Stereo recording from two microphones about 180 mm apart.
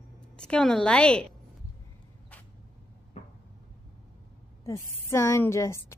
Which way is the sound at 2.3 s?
10° left (ahead or behind).